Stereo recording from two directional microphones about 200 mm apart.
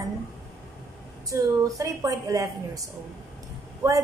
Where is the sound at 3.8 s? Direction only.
15° right (ahead or behind).